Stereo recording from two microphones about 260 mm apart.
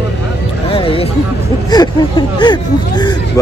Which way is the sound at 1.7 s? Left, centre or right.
Centre.